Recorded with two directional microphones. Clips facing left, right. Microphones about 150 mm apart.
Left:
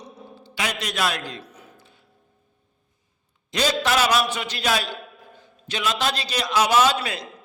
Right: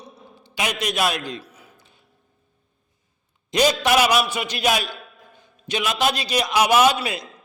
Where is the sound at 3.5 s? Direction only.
15° right (ahead or behind).